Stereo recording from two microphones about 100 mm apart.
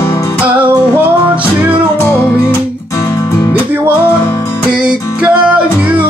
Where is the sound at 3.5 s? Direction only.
20° right (ahead or behind).